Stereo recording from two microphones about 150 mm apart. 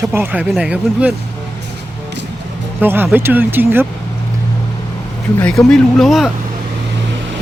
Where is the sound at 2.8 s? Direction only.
15° right (ahead or behind).